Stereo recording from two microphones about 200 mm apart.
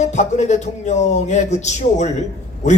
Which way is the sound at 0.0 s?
35° left (ahead or behind).